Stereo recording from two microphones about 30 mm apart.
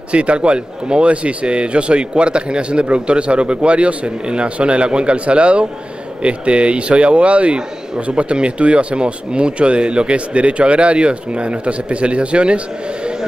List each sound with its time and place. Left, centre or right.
0.1 s speech: right